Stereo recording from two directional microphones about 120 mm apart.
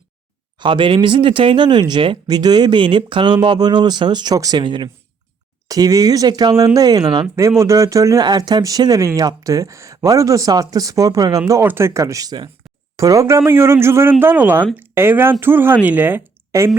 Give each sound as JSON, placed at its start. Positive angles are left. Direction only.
{"t": 0.6, "sound": "speech", "side_deg": -45}